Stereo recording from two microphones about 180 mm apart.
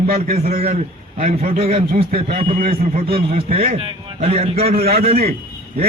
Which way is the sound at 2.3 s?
35° right (ahead or behind).